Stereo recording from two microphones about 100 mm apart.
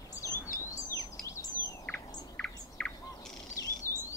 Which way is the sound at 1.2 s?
30° left (ahead or behind).